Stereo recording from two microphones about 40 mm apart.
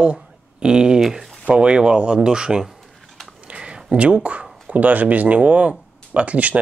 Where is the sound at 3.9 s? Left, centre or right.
Right.